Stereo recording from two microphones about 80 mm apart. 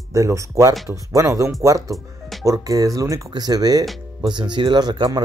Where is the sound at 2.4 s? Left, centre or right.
Right.